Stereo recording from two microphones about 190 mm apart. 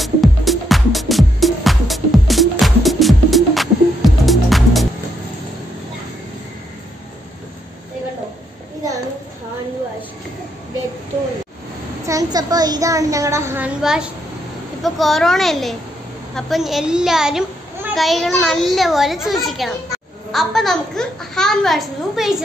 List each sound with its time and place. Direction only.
0.0 s music: centre (ahead or behind)
12.1 s a sound: 20° right (ahead or behind); by 14.1 s 5° right (ahead or behind)
14.8 s a child's voice: centre (ahead or behind)